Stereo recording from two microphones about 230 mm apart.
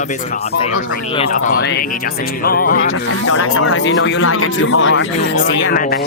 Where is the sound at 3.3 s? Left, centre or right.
Left.